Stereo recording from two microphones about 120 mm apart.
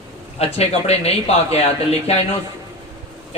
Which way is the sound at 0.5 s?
60° left (ahead or behind).